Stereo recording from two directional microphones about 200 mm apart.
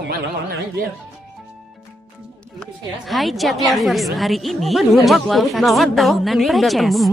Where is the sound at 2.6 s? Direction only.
Centre (ahead or behind).